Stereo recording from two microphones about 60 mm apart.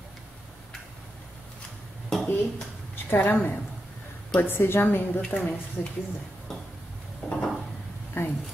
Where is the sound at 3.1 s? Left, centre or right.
Left.